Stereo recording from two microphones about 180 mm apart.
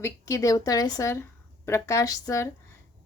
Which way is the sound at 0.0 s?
20° left (ahead or behind).